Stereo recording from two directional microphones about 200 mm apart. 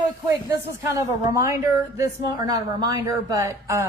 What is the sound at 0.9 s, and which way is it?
A woman's voice, 15° right (ahead or behind).